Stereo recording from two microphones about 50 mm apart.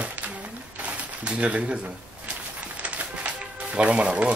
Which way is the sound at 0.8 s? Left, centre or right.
Right.